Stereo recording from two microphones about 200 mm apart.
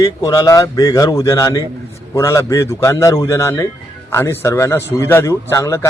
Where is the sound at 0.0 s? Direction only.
15° left (ahead or behind).